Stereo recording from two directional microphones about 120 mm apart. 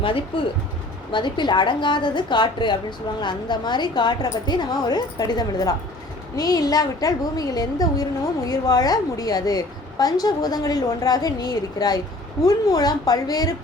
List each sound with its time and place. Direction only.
0.0 s a woman's voice: 45° left (ahead or behind)